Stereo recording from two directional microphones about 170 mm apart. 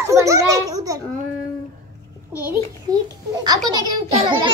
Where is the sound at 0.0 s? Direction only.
15° right (ahead or behind).